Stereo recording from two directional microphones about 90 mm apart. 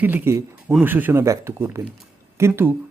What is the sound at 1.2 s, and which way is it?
Speech, 30° right (ahead or behind).